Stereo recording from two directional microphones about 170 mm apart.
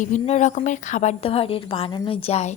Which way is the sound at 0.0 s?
45° left (ahead or behind).